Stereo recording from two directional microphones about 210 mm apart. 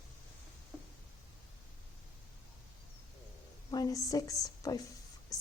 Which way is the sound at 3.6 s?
15° left (ahead or behind).